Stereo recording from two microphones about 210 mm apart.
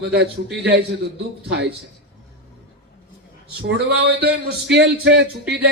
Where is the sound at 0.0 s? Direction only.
50° right (ahead or behind).